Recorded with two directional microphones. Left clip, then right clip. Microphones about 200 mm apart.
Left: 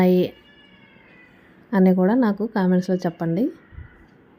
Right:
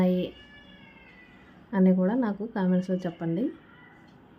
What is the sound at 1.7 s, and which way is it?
A woman's voice, 35° left (ahead or behind).